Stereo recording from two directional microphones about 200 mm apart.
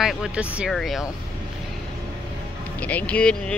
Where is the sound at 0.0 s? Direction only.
Centre (ahead or behind).